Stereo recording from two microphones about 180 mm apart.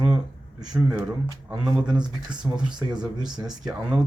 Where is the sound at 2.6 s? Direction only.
25° right (ahead or behind).